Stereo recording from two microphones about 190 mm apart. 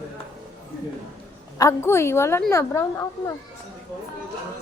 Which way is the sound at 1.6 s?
15° left (ahead or behind).